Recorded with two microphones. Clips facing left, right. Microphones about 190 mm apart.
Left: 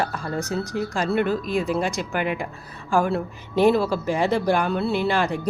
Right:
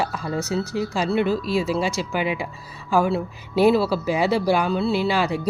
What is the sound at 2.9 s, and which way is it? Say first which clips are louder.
Speech: right 1 dB; 5° right (ahead or behind).